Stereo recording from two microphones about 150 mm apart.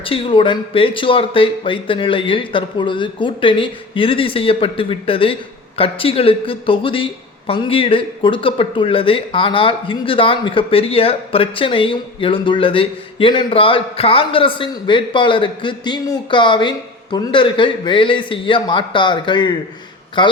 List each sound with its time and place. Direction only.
0.0 s speech: 35° left (ahead or behind)